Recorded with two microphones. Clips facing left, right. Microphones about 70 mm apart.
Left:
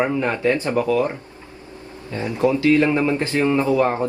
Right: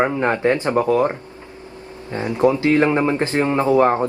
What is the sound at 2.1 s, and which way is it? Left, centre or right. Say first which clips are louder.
Speech: right 2 dB; right.